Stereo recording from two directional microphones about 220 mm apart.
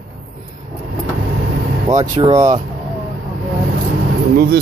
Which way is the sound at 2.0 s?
15° right (ahead or behind).